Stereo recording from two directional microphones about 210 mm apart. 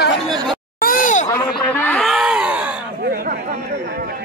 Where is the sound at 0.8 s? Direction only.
40° left (ahead or behind).